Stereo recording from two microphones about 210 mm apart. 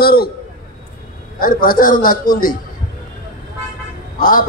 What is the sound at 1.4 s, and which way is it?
A man's voice, 40° left (ahead or behind).